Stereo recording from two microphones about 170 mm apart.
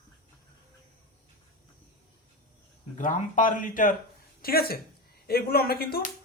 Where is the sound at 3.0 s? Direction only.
50° left (ahead or behind).